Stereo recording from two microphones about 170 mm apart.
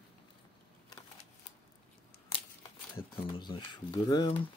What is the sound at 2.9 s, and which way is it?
Speech, 30° left (ahead or behind).